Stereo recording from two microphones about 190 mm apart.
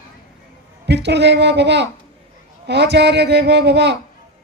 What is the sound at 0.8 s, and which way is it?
Speech, 65° right (ahead or behind).